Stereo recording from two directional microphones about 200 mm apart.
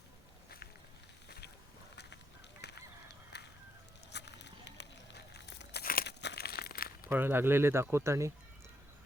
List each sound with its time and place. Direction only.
2.6 s goose: 55° left (ahead or behind)
4.1 s a sound: 60° left (ahead or behind)
7.1 s speech: 10° right (ahead or behind)